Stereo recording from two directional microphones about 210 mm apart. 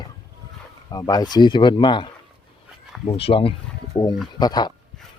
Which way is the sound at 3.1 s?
25° left (ahead or behind).